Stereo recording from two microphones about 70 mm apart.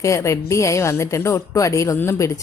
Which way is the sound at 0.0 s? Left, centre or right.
Left.